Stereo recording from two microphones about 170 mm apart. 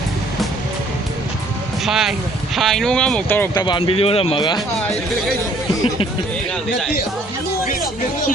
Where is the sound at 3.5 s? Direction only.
25° left (ahead or behind).